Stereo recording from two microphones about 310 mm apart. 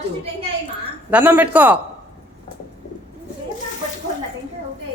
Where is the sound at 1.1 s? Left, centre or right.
Centre.